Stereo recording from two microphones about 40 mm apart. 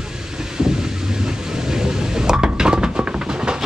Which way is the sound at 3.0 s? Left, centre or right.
Right.